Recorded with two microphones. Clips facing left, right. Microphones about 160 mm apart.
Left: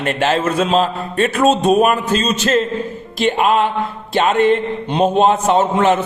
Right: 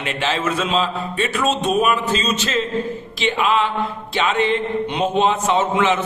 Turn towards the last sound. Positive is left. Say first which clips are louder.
# left 4 dB
turn(degrees=40)  # may be behind; listen again after turning